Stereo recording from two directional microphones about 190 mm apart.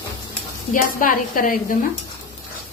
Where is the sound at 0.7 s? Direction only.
45° left (ahead or behind).